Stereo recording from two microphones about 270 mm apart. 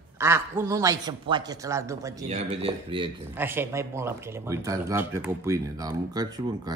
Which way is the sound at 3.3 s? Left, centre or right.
Centre.